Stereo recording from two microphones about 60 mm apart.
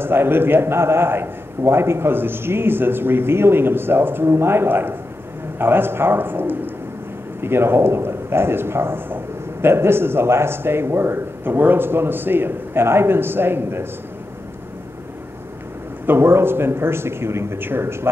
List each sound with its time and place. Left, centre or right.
0.0 s a man's voice: right
16.1 s speech: right